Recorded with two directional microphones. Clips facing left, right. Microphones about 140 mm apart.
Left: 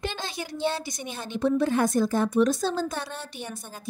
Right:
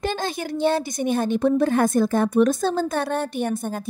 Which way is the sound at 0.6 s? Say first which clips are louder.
Right 8 dB; 55° right (ahead or behind).